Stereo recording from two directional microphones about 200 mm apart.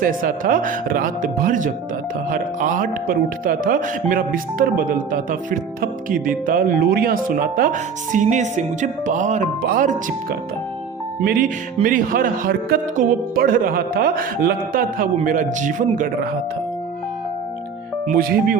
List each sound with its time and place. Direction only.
0.0 s speech: 45° right (ahead or behind)
18.1 s speech: 45° right (ahead or behind)